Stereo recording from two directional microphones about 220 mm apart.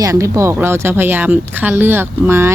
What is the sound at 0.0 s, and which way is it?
Speech, 15° right (ahead or behind).